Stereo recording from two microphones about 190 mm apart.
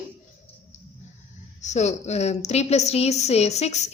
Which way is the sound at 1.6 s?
35° left (ahead or behind).